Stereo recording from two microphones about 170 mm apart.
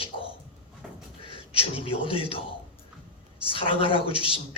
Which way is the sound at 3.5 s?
30° left (ahead or behind).